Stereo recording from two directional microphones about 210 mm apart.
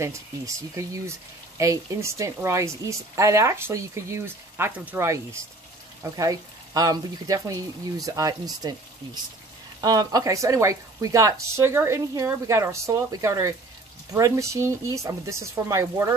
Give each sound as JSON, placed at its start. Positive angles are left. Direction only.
{"t": 1.6, "sound": "a woman's voice", "side_deg": -15}